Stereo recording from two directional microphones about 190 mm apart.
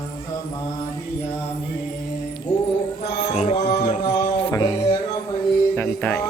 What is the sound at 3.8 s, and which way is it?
Mantra, 35° left (ahead or behind).